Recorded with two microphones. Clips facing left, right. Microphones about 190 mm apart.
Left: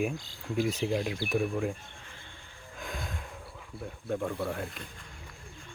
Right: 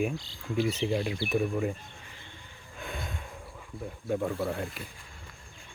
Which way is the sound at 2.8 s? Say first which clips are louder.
Right 1 dB; centre (ahead or behind).